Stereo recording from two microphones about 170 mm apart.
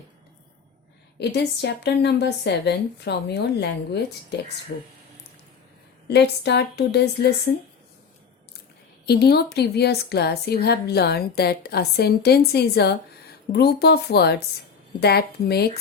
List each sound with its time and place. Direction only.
1.2 s a woman's voice: 75° left (ahead or behind)
6.1 s a woman's voice: 80° left
9.0 s a woman's voice: 70° left (ahead or behind)